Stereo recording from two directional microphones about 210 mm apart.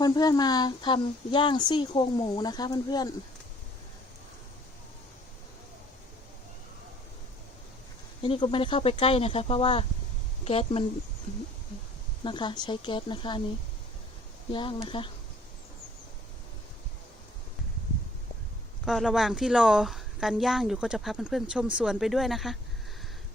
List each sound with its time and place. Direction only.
0.0 s speech: 20° left (ahead or behind)
8.2 s speech: 25° left (ahead or behind)
12.2 s speech: 20° left (ahead or behind)
14.5 s speech: 25° left (ahead or behind)
18.9 s speech: centre (ahead or behind)